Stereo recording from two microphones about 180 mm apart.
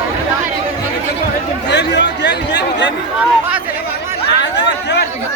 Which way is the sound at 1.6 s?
75° left (ahead or behind).